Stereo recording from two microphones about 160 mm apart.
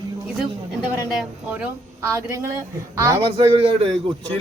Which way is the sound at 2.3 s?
20° right (ahead or behind).